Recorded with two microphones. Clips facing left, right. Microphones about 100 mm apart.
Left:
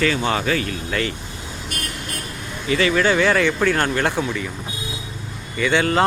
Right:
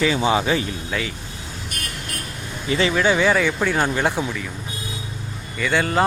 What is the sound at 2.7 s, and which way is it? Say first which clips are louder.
Speech: left 1 dB; 25° right (ahead or behind).